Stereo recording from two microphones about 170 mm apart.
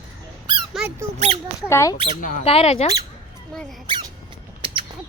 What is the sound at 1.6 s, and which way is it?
Speech, 15° left (ahead or behind).